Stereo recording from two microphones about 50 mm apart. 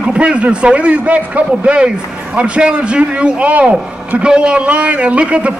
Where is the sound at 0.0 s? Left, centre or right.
Right.